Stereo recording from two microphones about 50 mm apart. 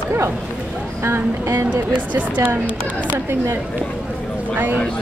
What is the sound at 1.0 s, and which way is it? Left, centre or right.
Speech, right.